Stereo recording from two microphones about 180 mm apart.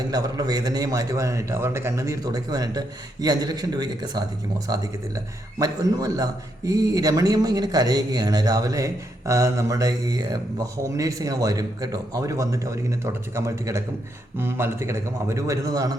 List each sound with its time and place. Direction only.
0.1 s a man's voice: 20° right (ahead or behind)